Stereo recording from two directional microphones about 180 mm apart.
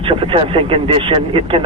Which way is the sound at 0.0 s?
30° right (ahead or behind).